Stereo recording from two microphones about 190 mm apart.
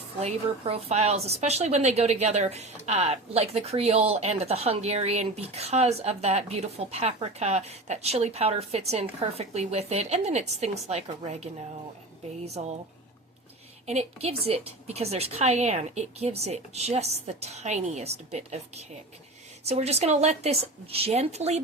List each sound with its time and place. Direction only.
0.2 s speech: 30° right (ahead or behind)
13.8 s speech: 35° right (ahead or behind)